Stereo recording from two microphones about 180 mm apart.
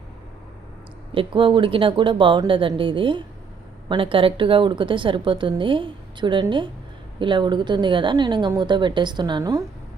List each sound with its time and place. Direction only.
1.1 s a woman's voice: 30° right (ahead or behind)